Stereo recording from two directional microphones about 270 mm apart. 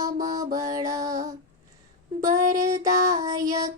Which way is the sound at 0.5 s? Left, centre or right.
Centre.